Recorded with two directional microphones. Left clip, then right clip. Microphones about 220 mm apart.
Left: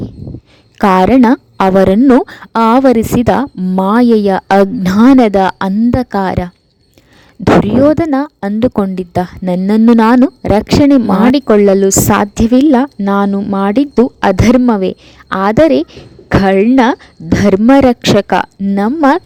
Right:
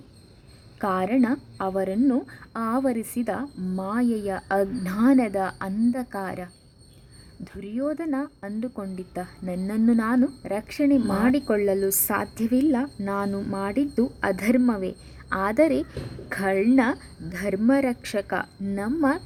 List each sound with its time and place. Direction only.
0.8 s a woman's voice: 45° left (ahead or behind)
7.8 s a woman's voice: 40° left (ahead or behind)